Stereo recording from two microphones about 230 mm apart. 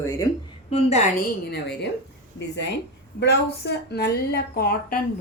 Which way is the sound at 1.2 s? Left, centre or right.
Left.